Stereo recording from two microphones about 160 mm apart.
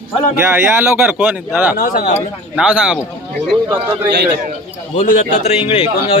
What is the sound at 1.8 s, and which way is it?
Speech, 55° left (ahead or behind).